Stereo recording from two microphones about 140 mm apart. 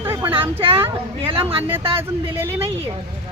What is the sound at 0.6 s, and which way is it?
Speech, 40° right (ahead or behind).